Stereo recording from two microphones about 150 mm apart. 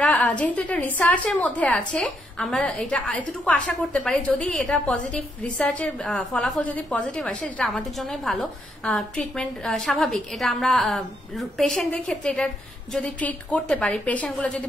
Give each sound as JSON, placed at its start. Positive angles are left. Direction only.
{"t": 0.0, "sound": "a woman's voice", "side_deg": 10}